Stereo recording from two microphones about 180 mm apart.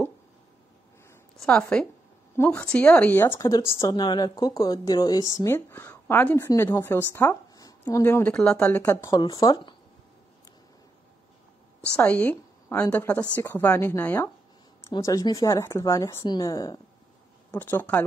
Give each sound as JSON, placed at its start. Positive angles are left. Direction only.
{"t": 1.4, "sound": "a woman's voice", "side_deg": 5}
{"t": 12.0, "sound": "a woman's voice", "side_deg": 10}